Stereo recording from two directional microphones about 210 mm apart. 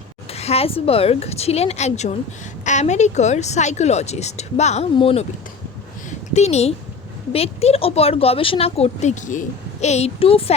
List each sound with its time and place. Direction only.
0.3 s speech: 30° left (ahead or behind)
6.1 s a sound: 30° left (ahead or behind)
7.3 s speech: 30° left (ahead or behind)